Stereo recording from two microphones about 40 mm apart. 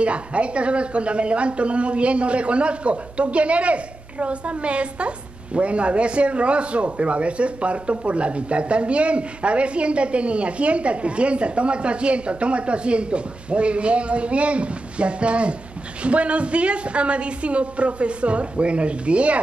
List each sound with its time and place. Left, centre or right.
0.0 s a woman's voice: right